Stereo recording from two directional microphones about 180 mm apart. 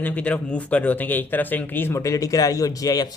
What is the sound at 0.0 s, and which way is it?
A man's voice, 5° left (ahead or behind).